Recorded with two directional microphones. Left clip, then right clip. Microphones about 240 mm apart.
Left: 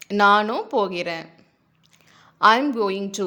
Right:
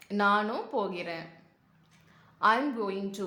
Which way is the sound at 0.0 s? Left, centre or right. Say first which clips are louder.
Left 10 dB; left.